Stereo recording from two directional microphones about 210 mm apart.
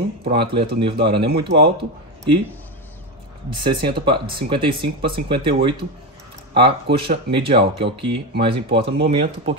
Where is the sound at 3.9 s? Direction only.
25° right (ahead or behind).